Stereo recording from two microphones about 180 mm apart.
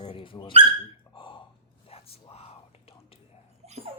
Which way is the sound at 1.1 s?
25° left (ahead or behind).